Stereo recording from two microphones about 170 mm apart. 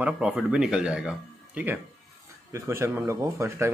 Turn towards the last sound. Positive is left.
turn(degrees=-15)  # may be behind; listen again after turning